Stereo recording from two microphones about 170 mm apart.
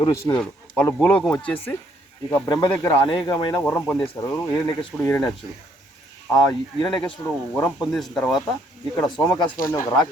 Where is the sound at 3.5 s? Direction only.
10° left (ahead or behind).